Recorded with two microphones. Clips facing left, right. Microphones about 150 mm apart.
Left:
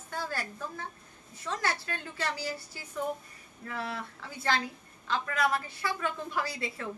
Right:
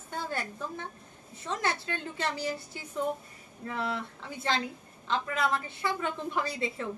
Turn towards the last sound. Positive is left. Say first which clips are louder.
# right 2 dB
turn(degrees=-20)  # may be behind; listen again after turning